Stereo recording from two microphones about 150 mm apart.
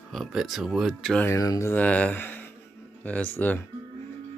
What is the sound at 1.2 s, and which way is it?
Speech, 20° left (ahead or behind).